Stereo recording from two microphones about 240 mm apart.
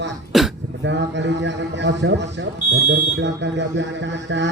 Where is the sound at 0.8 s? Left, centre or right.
Right.